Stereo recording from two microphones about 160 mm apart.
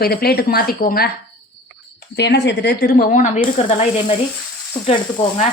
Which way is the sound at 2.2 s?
90° left.